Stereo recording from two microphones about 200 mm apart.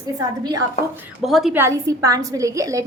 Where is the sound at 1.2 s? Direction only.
Centre (ahead or behind).